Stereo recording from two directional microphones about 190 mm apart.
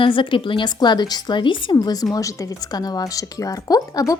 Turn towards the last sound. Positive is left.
turn(degrees=20)  # may be behind; listen again after turning